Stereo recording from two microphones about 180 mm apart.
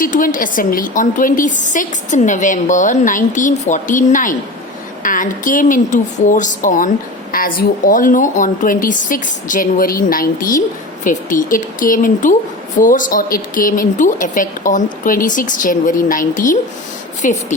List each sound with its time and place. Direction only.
0.0 s a woman's voice: 50° left (ahead or behind)